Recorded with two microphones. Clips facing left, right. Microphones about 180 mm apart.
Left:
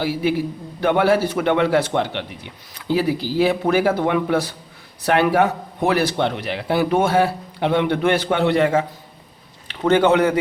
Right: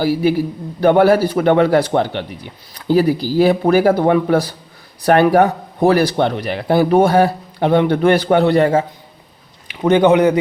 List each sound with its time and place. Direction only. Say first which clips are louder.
0.0 s a man's voice: right 5 dB; 40° right (ahead or behind)
9.6 s a man's voice: right 4 dB; 15° right (ahead or behind)